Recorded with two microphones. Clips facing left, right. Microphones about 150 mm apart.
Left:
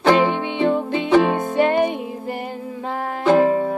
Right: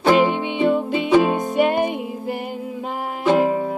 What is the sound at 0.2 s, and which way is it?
Music, 15° right (ahead or behind).